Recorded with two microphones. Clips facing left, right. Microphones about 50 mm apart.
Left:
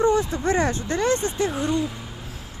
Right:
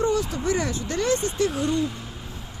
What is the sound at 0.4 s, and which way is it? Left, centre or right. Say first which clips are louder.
Speech: left 3 dB; left.